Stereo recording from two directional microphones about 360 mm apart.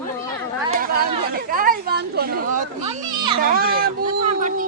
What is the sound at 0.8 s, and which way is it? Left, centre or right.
Chatter, right.